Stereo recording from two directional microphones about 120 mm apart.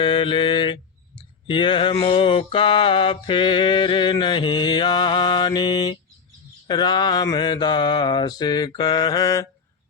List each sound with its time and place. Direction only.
0.0 s mantra: 40° left (ahead or behind)